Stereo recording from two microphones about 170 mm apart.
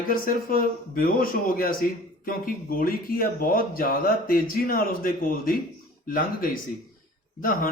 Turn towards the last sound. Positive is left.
turn(degrees=55)  # may be behind; listen again after turning